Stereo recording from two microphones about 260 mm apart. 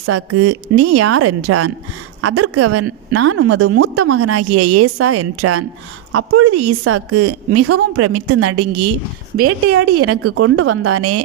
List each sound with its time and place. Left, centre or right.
0.0 s a woman's voice: right